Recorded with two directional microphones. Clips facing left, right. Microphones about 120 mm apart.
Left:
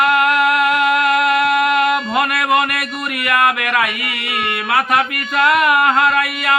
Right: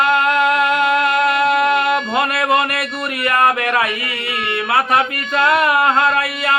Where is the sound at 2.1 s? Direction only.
30° right (ahead or behind).